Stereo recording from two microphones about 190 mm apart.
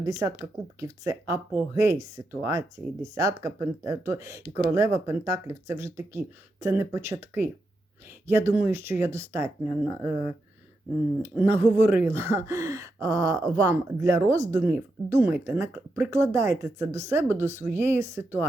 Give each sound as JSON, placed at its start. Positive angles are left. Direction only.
{"t": 0.0, "sound": "speech", "side_deg": -15}
{"t": 11.2, "sound": "speech", "side_deg": -10}